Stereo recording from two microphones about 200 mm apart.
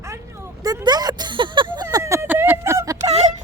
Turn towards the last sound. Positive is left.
turn(degrees=-35)  # may be behind; listen again after turning